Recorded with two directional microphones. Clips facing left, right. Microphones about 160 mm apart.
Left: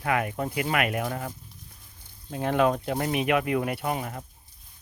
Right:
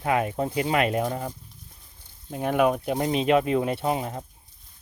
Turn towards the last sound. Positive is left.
turn(degrees=-25)  # may be behind; listen again after turning